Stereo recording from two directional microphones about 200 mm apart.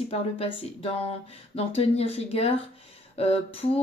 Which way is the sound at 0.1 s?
30° left (ahead or behind).